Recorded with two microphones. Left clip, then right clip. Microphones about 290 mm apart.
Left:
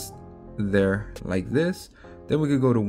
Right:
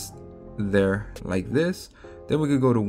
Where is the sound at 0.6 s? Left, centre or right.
Centre.